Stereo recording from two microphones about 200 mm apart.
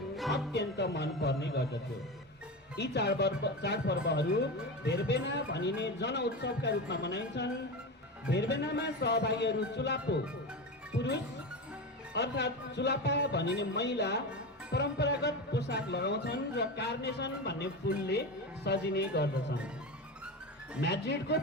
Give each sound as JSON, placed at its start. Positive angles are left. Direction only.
{"t": 0.3, "sound": "speech", "side_deg": 60}
{"t": 2.7, "sound": "speech", "side_deg": 60}
{"t": 20.8, "sound": "speech", "side_deg": 60}